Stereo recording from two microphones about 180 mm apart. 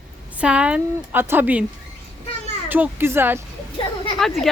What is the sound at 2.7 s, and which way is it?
Speech, 10° right (ahead or behind).